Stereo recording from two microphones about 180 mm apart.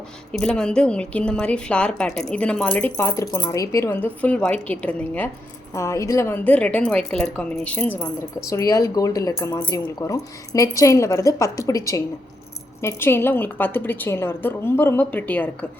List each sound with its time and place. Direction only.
0.3 s a woman's voice: 5° left (ahead or behind)